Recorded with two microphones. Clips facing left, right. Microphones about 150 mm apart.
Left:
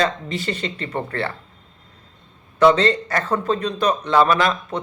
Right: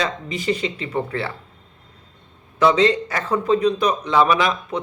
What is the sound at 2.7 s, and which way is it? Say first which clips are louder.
A man's voice: right 1 dB; 10° right (ahead or behind).